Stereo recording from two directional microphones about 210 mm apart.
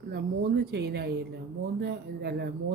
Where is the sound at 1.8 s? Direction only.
50° right (ahead or behind).